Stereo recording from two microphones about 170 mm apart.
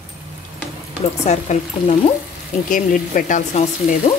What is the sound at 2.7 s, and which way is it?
A woman's voice, 50° left (ahead or behind).